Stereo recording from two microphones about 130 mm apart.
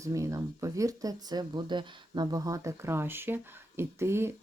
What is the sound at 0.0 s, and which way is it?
Speech, 25° right (ahead or behind).